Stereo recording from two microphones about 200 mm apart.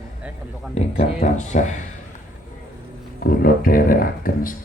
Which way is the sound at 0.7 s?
35° left (ahead or behind).